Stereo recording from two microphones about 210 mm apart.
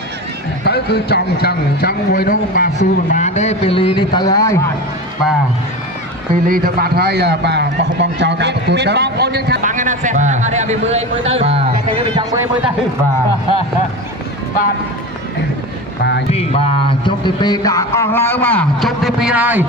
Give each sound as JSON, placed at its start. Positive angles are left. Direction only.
{"t": 0.6, "sound": "speech", "side_deg": 50}
{"t": 6.3, "sound": "a man's voice", "side_deg": -45}
{"t": 16.3, "sound": "speech", "side_deg": 30}